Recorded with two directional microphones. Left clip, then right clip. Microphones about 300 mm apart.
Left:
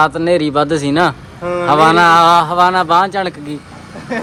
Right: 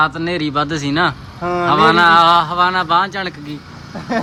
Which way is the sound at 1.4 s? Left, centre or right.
Right.